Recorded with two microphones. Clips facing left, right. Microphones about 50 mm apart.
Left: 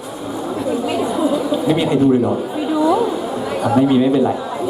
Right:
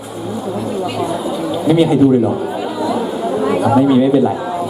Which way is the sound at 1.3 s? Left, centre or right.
Centre.